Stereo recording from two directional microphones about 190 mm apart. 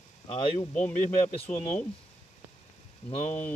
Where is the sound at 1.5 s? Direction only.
5° left (ahead or behind).